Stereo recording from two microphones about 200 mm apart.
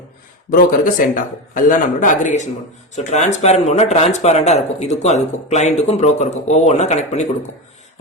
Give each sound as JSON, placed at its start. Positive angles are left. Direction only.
{"t": 0.5, "sound": "speech", "side_deg": 40}